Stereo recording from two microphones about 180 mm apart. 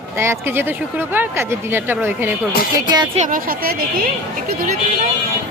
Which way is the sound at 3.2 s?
45° right (ahead or behind).